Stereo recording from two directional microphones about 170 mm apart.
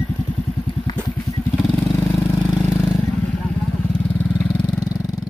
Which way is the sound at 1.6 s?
Centre (ahead or behind).